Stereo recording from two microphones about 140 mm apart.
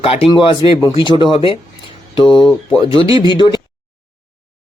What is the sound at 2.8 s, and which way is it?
Speech, 40° left (ahead or behind).